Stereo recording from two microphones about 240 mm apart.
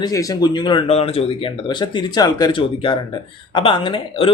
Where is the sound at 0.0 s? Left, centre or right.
Centre.